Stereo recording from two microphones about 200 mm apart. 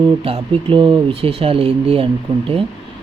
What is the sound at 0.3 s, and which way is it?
Speech, 25° right (ahead or behind).